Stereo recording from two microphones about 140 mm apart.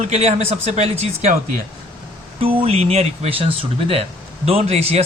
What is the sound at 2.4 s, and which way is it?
A man's voice, 40° right (ahead or behind).